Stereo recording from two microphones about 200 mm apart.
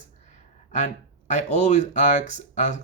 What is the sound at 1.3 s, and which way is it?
Speech, 35° left (ahead or behind).